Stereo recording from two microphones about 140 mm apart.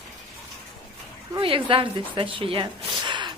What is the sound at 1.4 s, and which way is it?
Speech, 40° right (ahead or behind).